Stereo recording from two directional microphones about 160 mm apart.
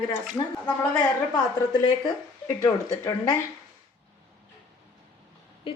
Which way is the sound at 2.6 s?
20° left (ahead or behind).